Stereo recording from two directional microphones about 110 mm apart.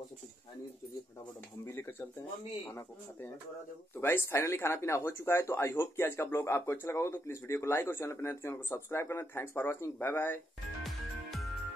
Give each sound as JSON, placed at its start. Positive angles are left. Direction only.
{"t": 1.7, "sound": "speech", "side_deg": 20}
{"t": 3.9, "sound": "speech", "side_deg": 20}
{"t": 10.8, "sound": "music", "side_deg": 0}